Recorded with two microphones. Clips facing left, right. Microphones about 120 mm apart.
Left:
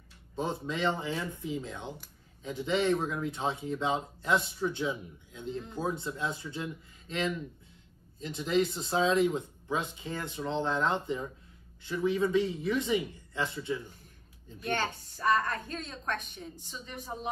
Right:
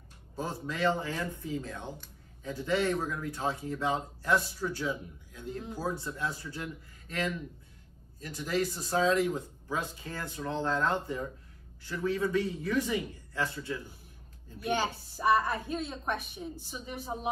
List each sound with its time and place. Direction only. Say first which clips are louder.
0.4 s speech: even; 20° left (ahead or behind)
14.6 s a woman's voice: right 2 dB; 10° right (ahead or behind)